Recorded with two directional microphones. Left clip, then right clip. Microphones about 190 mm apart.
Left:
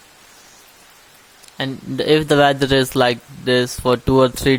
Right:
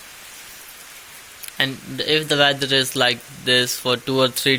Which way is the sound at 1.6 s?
25° left (ahead or behind).